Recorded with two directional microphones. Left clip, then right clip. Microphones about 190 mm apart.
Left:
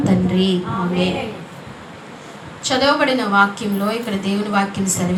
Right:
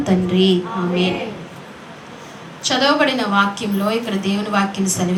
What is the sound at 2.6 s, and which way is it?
A woman's voice, 25° right (ahead or behind).